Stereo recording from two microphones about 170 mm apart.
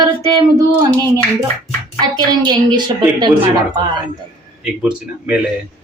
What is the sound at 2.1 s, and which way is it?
A woman's voice, 25° right (ahead or behind).